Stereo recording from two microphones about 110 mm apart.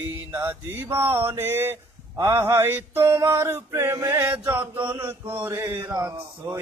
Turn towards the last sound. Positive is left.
turn(degrees=-25)  # may be behind; listen again after turning